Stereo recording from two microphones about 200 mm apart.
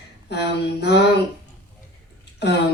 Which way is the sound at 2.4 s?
60° left (ahead or behind).